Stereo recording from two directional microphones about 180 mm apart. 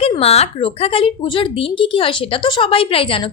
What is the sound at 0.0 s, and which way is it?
A woman's voice, 30° left (ahead or behind).